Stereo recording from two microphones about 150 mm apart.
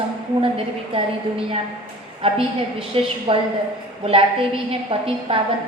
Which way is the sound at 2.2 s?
40° right (ahead or behind).